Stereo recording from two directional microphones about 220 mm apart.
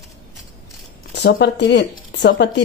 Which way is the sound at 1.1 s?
50° left (ahead or behind).